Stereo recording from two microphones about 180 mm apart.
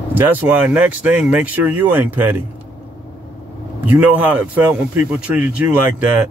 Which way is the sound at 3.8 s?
10° right (ahead or behind).